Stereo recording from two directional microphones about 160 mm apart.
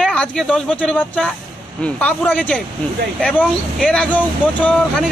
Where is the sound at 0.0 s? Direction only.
5° left (ahead or behind).